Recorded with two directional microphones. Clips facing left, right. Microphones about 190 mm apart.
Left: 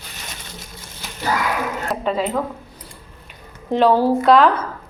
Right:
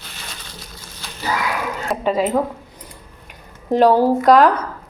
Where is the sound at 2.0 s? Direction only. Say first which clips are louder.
Right 3 dB; 10° right (ahead or behind).